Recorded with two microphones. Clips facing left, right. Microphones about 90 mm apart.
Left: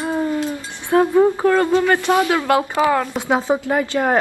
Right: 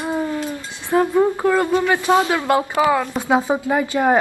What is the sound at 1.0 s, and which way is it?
Speech, 15° left (ahead or behind).